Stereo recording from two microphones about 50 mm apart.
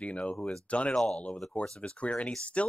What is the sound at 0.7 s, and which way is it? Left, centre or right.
Speech, left.